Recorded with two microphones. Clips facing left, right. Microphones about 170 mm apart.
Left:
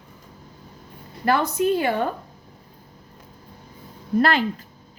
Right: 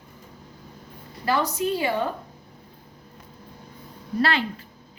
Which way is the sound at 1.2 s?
55° left (ahead or behind).